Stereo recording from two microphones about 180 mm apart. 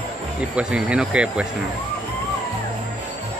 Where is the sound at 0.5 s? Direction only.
5° right (ahead or behind).